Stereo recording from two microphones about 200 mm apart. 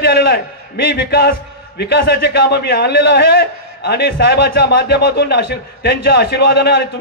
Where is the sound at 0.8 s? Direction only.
55° left (ahead or behind).